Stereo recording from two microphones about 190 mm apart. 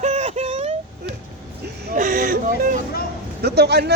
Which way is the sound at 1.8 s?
45° right (ahead or behind).